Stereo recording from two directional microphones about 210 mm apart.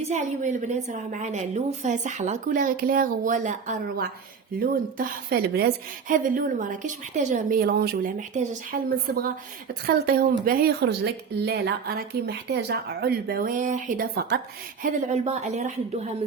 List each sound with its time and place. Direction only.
0.1 s a woman's voice: 35° right (ahead or behind)